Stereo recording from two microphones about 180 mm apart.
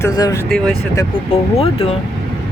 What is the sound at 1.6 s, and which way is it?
Speech, 30° left (ahead or behind).